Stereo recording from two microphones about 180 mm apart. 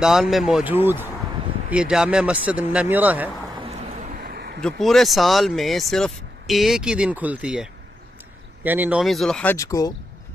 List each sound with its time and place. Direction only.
0.0 s speech: centre (ahead or behind)
4.2 s a sound: 55° right (ahead or behind)
4.6 s speech: 5° left (ahead or behind); by 9.9 s 20° left (ahead or behind)